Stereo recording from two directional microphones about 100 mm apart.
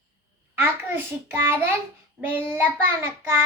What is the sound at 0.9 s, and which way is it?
Child singing, 25° right (ahead or behind).